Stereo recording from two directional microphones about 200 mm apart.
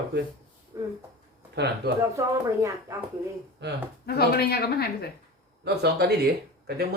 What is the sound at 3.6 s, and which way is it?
Speech, 60° right (ahead or behind).